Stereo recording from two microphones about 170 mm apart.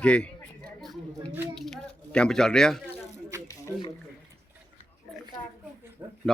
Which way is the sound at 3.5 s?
20° left (ahead or behind).